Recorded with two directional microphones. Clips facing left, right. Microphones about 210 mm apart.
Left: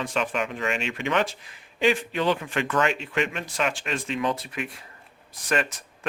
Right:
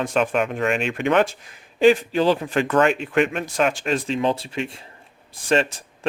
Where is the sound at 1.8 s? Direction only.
35° right (ahead or behind).